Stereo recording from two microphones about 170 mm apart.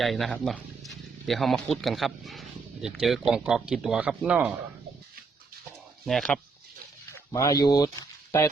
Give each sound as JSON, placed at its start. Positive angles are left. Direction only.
{"t": 0.0, "sound": "speech", "side_deg": 0}
{"t": 6.1, "sound": "speech", "side_deg": 5}
{"t": 7.3, "sound": "speech", "side_deg": 20}